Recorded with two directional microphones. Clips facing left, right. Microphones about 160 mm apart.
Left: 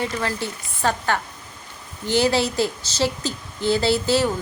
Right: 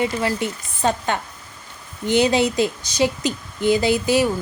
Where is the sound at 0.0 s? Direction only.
15° right (ahead or behind).